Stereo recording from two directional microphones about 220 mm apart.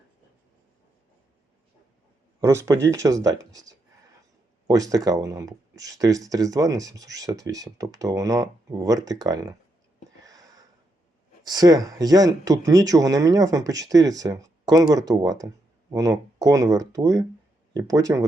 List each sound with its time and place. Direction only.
2.4 s speech: 10° right (ahead or behind)
10.2 s a sound: 15° right (ahead or behind)
11.4 s speech: 15° right (ahead or behind)